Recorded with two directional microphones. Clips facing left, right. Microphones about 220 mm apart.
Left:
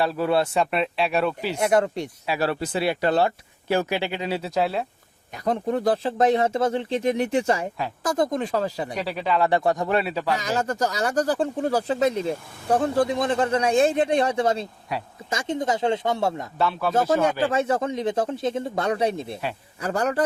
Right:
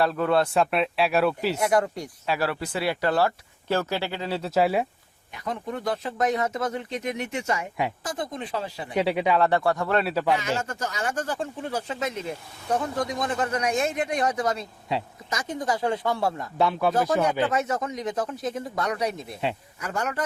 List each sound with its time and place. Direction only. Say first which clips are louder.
0.0 s speech: even; 5° left (ahead or behind)
1.5 s speech: left 2 dB; 25° left (ahead or behind)
4.4 s speech: right 5 dB; 5° right (ahead or behind)
5.3 s speech: left 7 dB; 35° left (ahead or behind)
8.0 s speech: left 8 dB; 45° left (ahead or behind)
9.0 s speech: right 7 dB; 20° right (ahead or behind)
9.6 s speech: left 1 dB; 20° left (ahead or behind)
10.4 s speech: left 4 dB; 35° left (ahead or behind)
14.9 s speech: right 3 dB; 25° right (ahead or behind)
15.3 s speech: left 3 dB; 25° left (ahead or behind)
16.6 s speech: right 3 dB; 15° right (ahead or behind)
16.9 s speech: left 2 dB; 25° left (ahead or behind)